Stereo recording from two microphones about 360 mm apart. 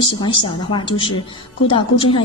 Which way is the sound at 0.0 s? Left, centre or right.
Centre.